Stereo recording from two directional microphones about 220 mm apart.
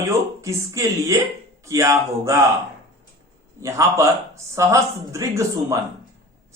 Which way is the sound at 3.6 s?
15° right (ahead or behind).